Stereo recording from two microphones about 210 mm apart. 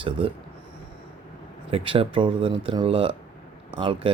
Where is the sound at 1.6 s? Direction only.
25° right (ahead or behind).